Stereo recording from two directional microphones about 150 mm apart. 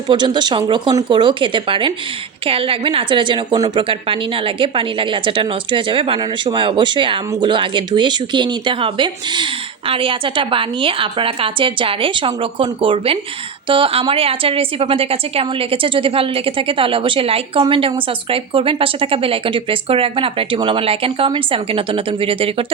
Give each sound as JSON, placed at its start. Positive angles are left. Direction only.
{"t": 0.1, "sound": "a woman's voice", "side_deg": -30}